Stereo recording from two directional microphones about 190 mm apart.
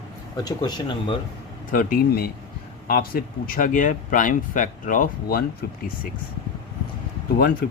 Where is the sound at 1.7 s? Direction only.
45° left (ahead or behind).